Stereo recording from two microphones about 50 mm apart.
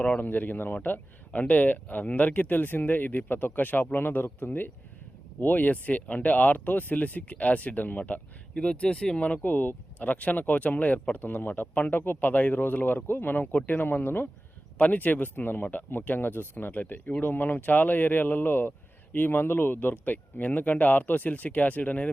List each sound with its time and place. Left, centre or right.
0.2 s speech: left
8.5 s speech: left